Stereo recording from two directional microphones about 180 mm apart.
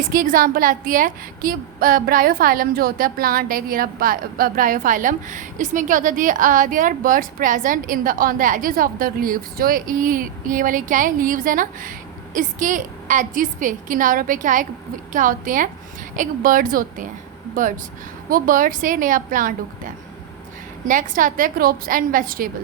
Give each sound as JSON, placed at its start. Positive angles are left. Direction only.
{"t": 0.1, "sound": "a woman's voice", "side_deg": -50}